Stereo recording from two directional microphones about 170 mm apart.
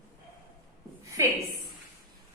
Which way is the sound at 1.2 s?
20° right (ahead or behind).